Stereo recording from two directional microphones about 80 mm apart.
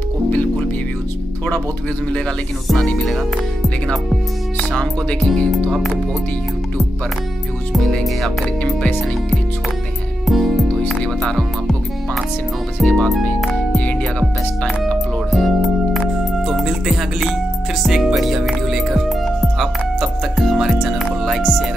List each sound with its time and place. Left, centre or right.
0.3 s music: centre
2.9 s speech: centre
3.6 s music: centre
7.7 s music: centre
10.2 s music: centre
10.9 s music: centre
12.8 s speech: centre
15.3 s music: centre
17.8 s speech: centre